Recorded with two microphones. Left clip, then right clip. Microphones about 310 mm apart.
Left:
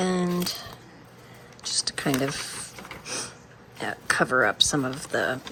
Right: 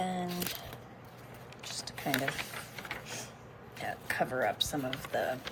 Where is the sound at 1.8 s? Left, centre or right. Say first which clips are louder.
Left 13 dB; left.